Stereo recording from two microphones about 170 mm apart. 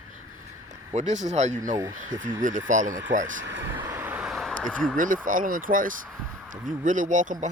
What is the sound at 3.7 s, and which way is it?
Vehicle, 10° right (ahead or behind).